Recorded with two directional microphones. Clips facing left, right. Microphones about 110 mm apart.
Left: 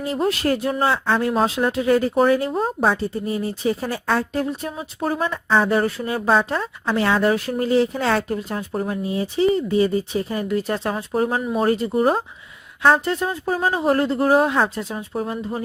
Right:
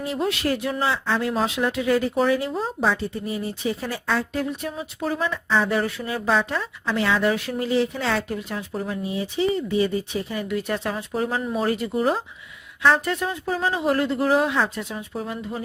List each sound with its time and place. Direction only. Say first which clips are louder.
0.1 s speech: left 4 dB; 40° left (ahead or behind)